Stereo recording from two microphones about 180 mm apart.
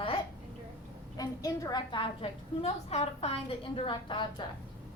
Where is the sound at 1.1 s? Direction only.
20° left (ahead or behind).